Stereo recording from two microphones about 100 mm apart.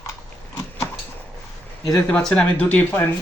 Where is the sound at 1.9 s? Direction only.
10° left (ahead or behind).